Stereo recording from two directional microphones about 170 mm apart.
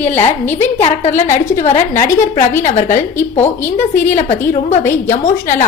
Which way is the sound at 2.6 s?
45° left (ahead or behind).